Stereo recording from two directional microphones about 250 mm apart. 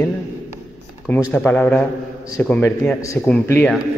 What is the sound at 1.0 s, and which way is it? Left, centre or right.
A man's voice, centre.